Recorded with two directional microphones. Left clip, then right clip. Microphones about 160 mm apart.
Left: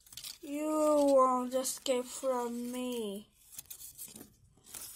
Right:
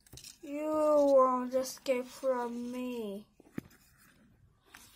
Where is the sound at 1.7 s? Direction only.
Centre (ahead or behind).